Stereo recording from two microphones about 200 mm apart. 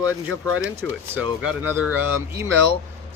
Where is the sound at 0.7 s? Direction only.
10° right (ahead or behind).